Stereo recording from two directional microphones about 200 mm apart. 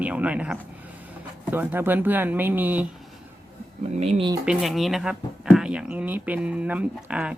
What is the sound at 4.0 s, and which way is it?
Speech, 30° right (ahead or behind).